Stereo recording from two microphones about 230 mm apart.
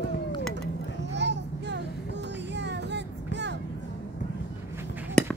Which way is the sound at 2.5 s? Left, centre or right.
Right.